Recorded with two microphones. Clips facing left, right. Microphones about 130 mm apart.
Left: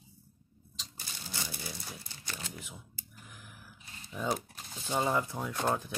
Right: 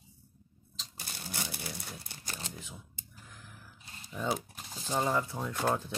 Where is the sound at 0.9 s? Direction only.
60° right (ahead or behind).